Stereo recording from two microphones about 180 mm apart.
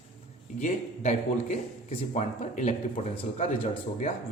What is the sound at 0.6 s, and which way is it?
A man's voice, 40° left (ahead or behind).